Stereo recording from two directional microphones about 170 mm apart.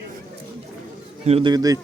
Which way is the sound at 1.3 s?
35° right (ahead or behind).